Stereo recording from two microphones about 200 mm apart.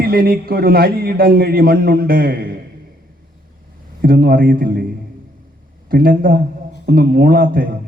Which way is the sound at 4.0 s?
45° right (ahead or behind).